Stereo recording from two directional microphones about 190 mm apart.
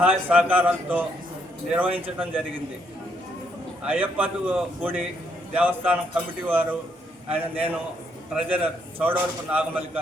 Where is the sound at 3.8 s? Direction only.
10° right (ahead or behind).